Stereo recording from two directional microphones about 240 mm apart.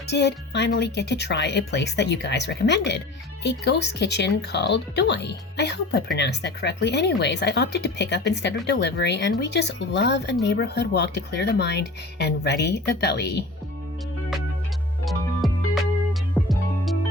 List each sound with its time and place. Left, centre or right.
0.1 s speech: left
15.0 s music: centre